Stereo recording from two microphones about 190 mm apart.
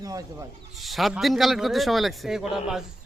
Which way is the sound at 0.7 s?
Centre (ahead or behind).